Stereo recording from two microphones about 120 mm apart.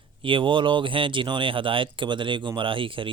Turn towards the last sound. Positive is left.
turn(degrees=-45)  # may be behind; listen again after turning